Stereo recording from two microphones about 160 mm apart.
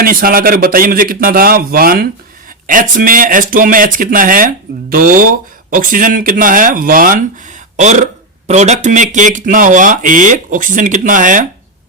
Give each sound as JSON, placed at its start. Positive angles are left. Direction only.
{"t": 0.0, "sound": "speech", "side_deg": -65}